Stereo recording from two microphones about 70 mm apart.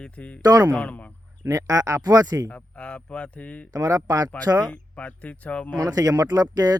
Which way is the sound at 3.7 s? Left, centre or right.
Right.